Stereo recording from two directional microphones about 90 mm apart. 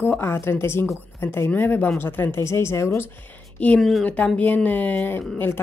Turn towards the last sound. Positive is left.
turn(degrees=20)  # may be behind; listen again after turning